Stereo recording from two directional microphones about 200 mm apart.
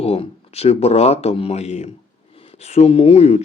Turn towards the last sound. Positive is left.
turn(degrees=30)  # may be behind; listen again after turning